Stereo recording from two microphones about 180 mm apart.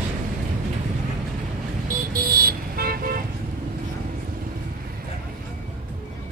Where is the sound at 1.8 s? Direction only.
55° right (ahead or behind).